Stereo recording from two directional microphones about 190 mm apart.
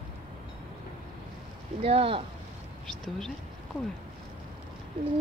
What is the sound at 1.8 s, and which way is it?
Speech, 30° right (ahead or behind).